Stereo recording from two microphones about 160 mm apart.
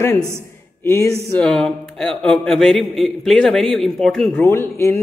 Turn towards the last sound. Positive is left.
turn(degrees=15)  # may be behind; listen again after turning